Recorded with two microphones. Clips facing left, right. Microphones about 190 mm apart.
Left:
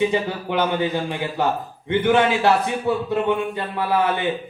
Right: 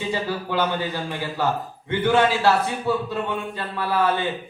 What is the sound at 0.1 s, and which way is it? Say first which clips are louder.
A man's voice: left 3 dB; 20° left (ahead or behind).